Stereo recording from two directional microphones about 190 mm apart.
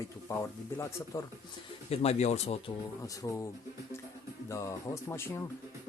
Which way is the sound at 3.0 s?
15° left (ahead or behind).